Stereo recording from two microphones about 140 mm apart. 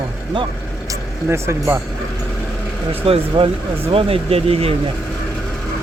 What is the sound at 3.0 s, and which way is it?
Speech, 45° right (ahead or behind).